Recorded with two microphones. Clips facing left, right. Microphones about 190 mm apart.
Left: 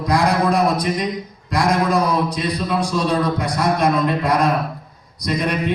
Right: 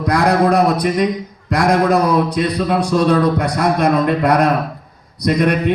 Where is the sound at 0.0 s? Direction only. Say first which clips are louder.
Right 3 dB; 65° right (ahead or behind).